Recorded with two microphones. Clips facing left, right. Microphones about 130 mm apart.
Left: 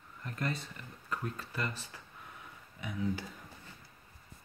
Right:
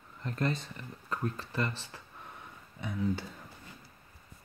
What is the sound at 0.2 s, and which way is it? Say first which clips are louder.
Speech: right 5 dB; 25° right (ahead or behind).